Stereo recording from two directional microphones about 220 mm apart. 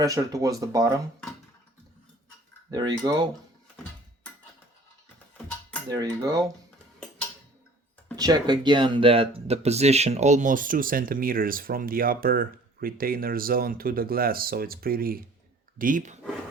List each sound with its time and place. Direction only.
0.0 s speech: 15° right (ahead or behind)
2.6 s speech: 20° right (ahead or behind)
5.9 s speech: 15° right (ahead or behind)
8.1 s speech: 20° right (ahead or behind); by 16.2 s 35° right (ahead or behind)